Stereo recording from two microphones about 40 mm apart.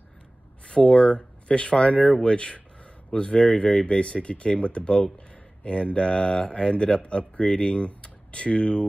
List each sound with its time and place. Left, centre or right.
0.7 s speech: left